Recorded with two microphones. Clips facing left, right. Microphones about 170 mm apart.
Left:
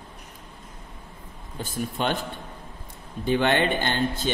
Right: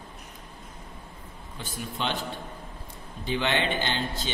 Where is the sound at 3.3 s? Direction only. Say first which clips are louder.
Left 5 dB; 50° left (ahead or behind).